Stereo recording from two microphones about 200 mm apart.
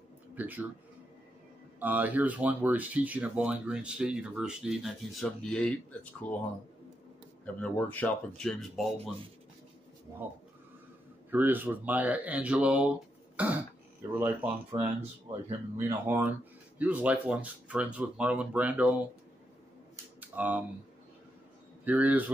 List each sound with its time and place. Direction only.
0.4 s speech: 10° right (ahead or behind)
1.8 s speech: 10° right (ahead or behind); by 6.4 s 5° left (ahead or behind)
7.4 s speech: 5° left (ahead or behind)
11.2 s speech: 10° right (ahead or behind)
14.9 s speech: 30° right (ahead or behind)
15.9 s speech: 10° right (ahead or behind)
20.2 s a sound: 10° right (ahead or behind)
21.8 s speech: 10° right (ahead or behind)